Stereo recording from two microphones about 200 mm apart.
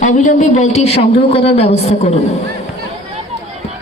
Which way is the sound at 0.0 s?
40° left (ahead or behind).